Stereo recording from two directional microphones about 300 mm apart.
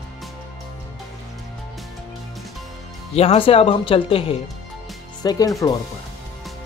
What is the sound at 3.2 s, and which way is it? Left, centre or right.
Speech, centre.